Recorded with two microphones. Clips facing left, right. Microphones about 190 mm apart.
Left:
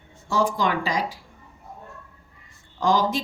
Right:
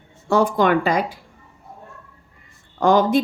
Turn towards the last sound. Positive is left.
turn(degrees=-55)  # may be behind; listen again after turning